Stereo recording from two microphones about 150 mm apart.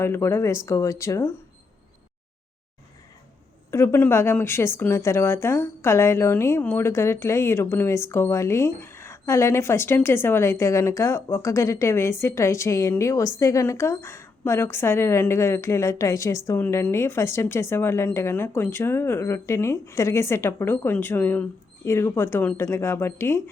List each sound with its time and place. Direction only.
0.0 s a woman's voice: 15° left (ahead or behind)
3.7 s a woman's voice: 15° left (ahead or behind)